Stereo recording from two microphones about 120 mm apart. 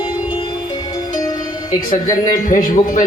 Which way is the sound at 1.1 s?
30° left (ahead or behind).